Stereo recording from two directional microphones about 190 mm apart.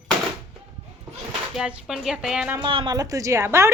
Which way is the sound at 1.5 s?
5° right (ahead or behind).